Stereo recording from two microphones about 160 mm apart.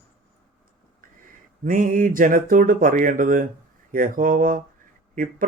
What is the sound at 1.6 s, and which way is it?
Speech, 55° right (ahead or behind).